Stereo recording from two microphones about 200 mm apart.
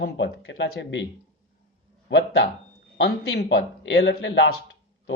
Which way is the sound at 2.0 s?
65° left (ahead or behind).